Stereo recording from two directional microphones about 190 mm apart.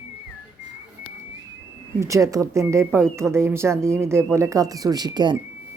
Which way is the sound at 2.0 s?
15° right (ahead or behind).